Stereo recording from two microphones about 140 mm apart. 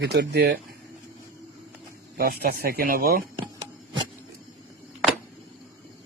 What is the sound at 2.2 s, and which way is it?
Speech, 90° right.